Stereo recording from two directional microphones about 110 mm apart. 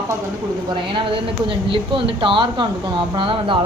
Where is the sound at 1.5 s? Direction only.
50° right (ahead or behind).